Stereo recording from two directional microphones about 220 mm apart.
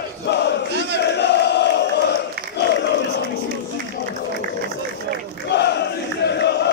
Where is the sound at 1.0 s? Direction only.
50° left (ahead or behind).